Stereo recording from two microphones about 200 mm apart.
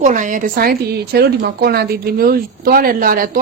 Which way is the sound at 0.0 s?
40° right (ahead or behind).